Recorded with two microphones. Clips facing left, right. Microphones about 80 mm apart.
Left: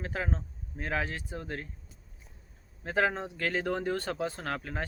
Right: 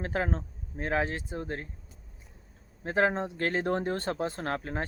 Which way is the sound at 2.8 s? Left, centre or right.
Right.